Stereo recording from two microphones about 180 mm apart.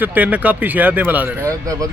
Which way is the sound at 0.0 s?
10° right (ahead or behind).